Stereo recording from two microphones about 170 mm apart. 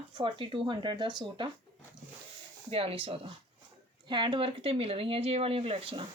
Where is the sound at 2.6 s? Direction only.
35° right (ahead or behind).